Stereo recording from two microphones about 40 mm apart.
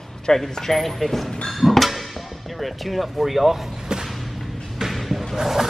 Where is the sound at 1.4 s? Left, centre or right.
Centre.